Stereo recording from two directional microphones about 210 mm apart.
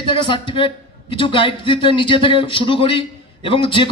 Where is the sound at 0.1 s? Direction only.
25° left (ahead or behind).